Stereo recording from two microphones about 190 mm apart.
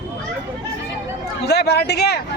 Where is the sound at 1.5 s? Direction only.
60° left (ahead or behind).